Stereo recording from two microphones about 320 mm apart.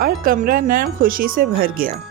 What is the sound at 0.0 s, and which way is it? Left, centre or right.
Speech, right.